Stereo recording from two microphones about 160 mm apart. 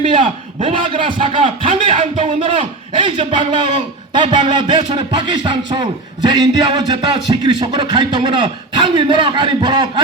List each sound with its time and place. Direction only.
0.1 s a man's voice: 35° right (ahead or behind)